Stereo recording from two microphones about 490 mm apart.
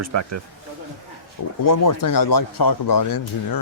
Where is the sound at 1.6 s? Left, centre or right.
Left.